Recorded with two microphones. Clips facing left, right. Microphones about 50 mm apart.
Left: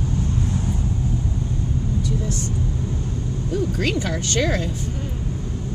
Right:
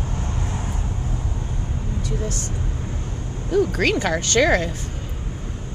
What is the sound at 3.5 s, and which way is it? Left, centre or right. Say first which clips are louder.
Speech: right 5 dB; right.